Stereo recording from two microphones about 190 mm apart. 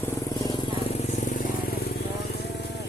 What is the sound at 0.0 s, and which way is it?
Vehicle, 20° left (ahead or behind).